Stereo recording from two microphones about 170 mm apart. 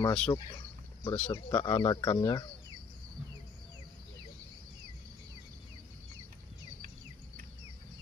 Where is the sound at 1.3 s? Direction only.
25° left (ahead or behind).